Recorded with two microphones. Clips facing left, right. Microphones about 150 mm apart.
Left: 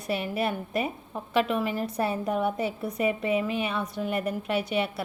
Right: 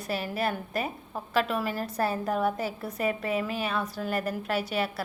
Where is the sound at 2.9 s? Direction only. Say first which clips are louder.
Left 3 dB; centre (ahead or behind).